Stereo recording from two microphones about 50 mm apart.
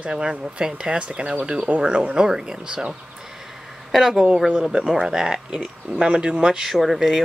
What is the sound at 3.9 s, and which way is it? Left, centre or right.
Speech, centre.